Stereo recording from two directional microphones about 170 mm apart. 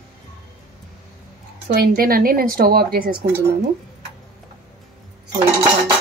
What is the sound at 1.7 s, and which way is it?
Speech, 60° right (ahead or behind).